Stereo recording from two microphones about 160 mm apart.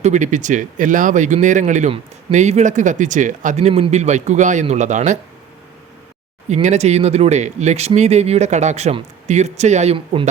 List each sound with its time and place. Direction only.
0.0 s speech: 50° right (ahead or behind)
6.5 s speech: 45° right (ahead or behind)